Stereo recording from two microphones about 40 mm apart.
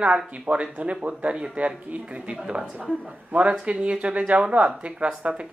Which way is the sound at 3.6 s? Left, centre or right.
Right.